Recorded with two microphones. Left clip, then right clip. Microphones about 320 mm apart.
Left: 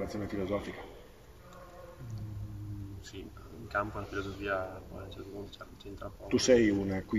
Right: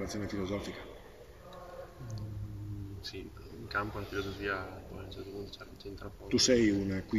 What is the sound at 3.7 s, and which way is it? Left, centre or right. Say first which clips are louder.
Speech: left 1 dB; centre.